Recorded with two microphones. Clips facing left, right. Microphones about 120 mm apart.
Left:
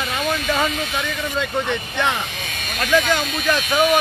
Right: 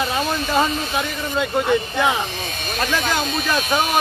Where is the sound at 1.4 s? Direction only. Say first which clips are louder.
Right 6 dB; 5° right (ahead or behind).